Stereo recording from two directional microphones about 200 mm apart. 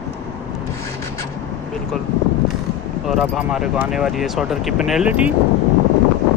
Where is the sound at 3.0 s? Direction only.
Centre (ahead or behind).